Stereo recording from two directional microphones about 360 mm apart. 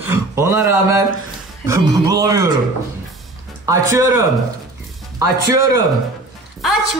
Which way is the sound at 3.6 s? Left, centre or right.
Centre.